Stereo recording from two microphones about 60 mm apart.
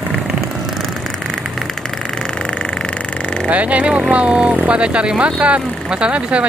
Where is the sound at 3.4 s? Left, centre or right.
Right.